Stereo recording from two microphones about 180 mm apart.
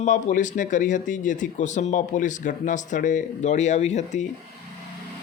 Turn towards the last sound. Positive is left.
turn(degrees=40)  # may be behind; listen again after turning